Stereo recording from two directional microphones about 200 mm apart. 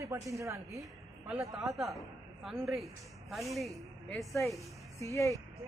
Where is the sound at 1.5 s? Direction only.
Centre (ahead or behind).